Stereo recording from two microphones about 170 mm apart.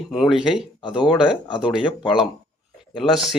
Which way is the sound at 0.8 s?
30° left (ahead or behind).